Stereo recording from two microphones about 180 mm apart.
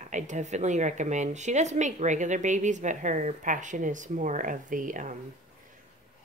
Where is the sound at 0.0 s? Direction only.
40° right (ahead or behind).